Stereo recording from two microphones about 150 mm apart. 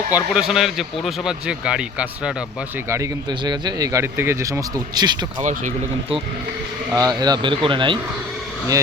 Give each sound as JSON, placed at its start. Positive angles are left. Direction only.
{"t": 0.1, "sound": "speech", "side_deg": -5}
{"t": 2.9, "sound": "speech", "side_deg": -25}
{"t": 5.4, "sound": "speech", "side_deg": -55}
{"t": 6.9, "sound": "speech", "side_deg": -25}